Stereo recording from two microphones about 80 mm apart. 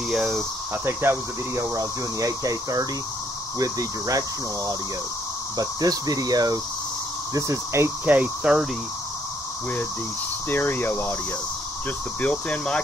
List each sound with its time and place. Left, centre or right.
0.8 s speech: right
5.6 s speech: right
7.3 s speech: right
8.0 s speech: right
10.5 s speech: left
12.2 s speech: centre